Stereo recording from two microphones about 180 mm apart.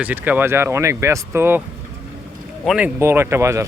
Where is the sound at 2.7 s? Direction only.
10° right (ahead or behind).